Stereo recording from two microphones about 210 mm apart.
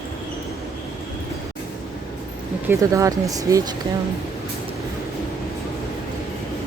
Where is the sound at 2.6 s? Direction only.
15° right (ahead or behind).